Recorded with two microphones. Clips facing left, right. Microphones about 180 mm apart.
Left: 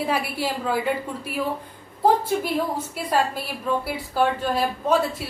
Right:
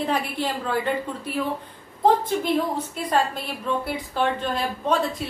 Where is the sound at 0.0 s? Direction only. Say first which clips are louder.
Even; 10° left (ahead or behind).